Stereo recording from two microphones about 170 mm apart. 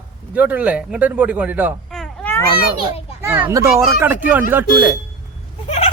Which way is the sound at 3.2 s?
10° right (ahead or behind).